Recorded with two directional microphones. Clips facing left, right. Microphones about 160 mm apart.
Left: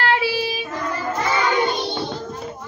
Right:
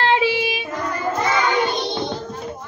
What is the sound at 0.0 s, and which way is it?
Child singing, 20° right (ahead or behind).